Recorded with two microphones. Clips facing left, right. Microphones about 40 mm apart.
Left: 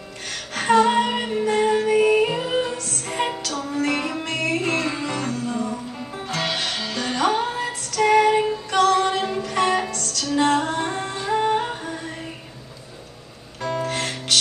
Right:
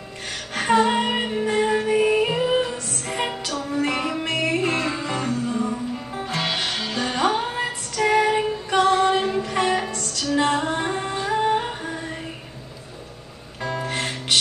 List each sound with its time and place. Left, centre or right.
0.6 s music: centre
3.4 s music: centre
7.5 s female singing: centre
8.0 s music: centre
8.6 s music: right
11.2 s music: centre
13.6 s music: centre